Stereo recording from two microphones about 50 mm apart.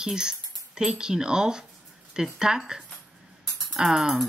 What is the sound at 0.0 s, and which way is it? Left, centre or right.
Speech, centre.